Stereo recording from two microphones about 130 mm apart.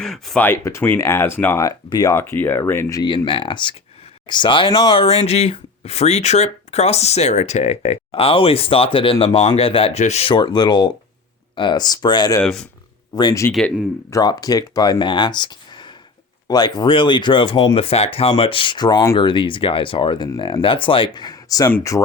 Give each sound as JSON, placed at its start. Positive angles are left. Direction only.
{"t": 0.0, "sound": "speech", "side_deg": 0}
{"t": 0.4, "sound": "speech", "side_deg": 20}
{"t": 1.6, "sound": "speech", "side_deg": 30}
{"t": 2.1, "sound": "speech", "side_deg": 15}
{"t": 3.0, "sound": "speech", "side_deg": 35}
{"t": 9.1, "sound": "speech", "side_deg": 50}
{"t": 10.0, "sound": "speech", "side_deg": 55}
{"t": 10.3, "sound": "speech", "side_deg": 35}
{"t": 12.4, "sound": "speech", "side_deg": 5}
{"t": 13.1, "sound": "speech", "side_deg": 35}
{"t": 21.9, "sound": "speech", "side_deg": 15}